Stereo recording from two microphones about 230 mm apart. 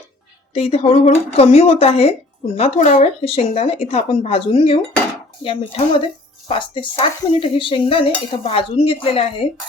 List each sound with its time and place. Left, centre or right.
0.5 s dishes: left